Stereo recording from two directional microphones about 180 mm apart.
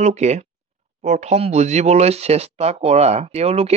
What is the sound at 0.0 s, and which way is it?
Speech, 40° right (ahead or behind).